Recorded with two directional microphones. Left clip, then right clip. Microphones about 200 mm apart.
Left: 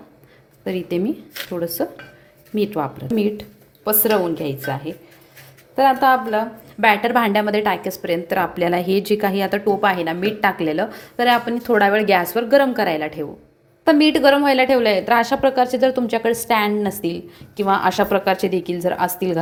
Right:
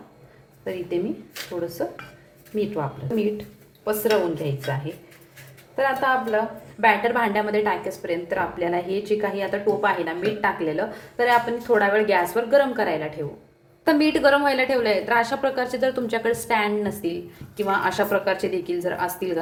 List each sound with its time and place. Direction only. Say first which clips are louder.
0.6 s a woman's voice: left 4 dB; 55° left (ahead or behind)
13.8 s a woman's voice: left 5 dB; 35° left (ahead or behind)